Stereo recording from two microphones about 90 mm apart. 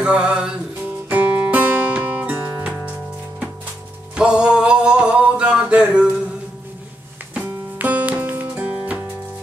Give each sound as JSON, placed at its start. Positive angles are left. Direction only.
{"t": 0.0, "sound": "music", "side_deg": -10}
{"t": 2.6, "sound": "music", "side_deg": -15}
{"t": 4.1, "sound": "music", "side_deg": -10}
{"t": 7.3, "sound": "music", "side_deg": -15}